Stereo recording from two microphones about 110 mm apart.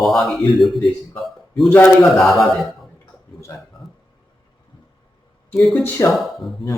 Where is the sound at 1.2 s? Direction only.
Centre (ahead or behind).